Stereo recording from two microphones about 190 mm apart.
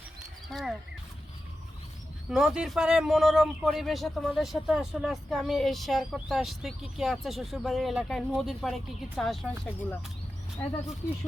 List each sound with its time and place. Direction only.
0.5 s speech: 5° right (ahead or behind)
2.3 s speech: 5° right (ahead or behind)